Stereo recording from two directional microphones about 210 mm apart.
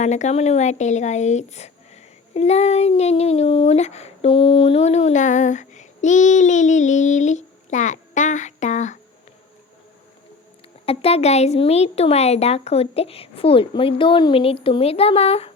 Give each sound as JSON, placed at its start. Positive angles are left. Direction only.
{"t": 0.0, "sound": "speech", "side_deg": 35}
{"t": 10.8, "sound": "speech", "side_deg": 30}